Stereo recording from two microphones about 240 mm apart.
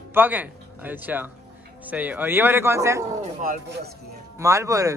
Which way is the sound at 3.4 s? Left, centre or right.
Right.